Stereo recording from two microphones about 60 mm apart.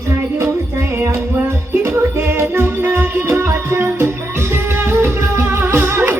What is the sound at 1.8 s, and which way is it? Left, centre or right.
Music, right.